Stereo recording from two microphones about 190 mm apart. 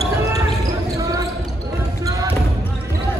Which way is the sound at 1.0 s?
20° right (ahead or behind).